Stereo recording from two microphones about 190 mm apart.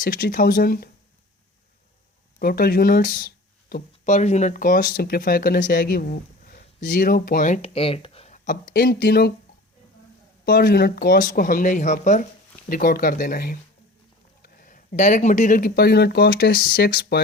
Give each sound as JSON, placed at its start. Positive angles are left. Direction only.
{"t": 0.0, "sound": "speech", "side_deg": 45}
{"t": 2.4, "sound": "speech", "side_deg": 50}
{"t": 8.4, "sound": "speech", "side_deg": 50}
{"t": 10.4, "sound": "speech", "side_deg": 50}